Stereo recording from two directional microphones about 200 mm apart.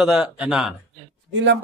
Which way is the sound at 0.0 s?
5° right (ahead or behind).